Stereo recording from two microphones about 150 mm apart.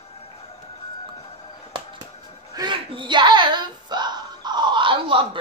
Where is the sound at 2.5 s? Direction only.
30° right (ahead or behind).